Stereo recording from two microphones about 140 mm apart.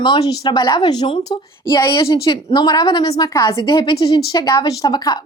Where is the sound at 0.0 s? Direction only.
30° left (ahead or behind).